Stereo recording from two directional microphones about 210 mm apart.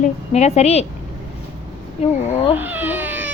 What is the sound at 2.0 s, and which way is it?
Speech, 30° left (ahead or behind).